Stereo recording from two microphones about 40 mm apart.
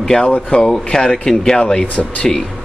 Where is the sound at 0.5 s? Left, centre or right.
Left.